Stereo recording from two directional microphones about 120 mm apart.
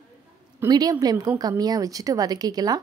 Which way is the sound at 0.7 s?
30° right (ahead or behind).